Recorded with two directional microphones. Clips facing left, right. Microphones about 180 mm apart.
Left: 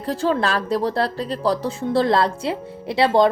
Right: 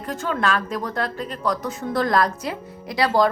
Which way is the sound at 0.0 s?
30° left (ahead or behind).